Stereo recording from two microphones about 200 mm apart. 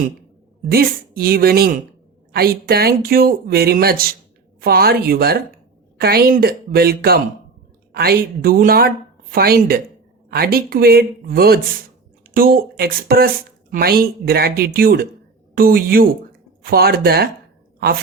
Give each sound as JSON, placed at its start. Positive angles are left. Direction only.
{"t": 0.7, "sound": "speech", "side_deg": -45}